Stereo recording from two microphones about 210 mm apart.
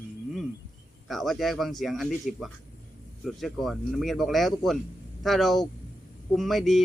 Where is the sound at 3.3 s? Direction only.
Centre (ahead or behind).